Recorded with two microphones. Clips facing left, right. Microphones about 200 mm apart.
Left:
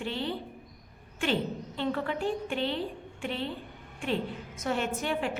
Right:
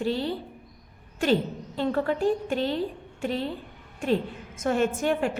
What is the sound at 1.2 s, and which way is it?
A woman's voice, 40° right (ahead or behind).